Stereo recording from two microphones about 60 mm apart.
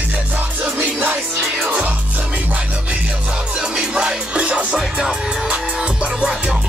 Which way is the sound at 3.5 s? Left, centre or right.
Centre.